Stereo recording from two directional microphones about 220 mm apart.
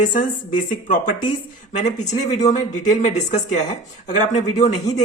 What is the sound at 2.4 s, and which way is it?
A woman's voice, 30° left (ahead or behind).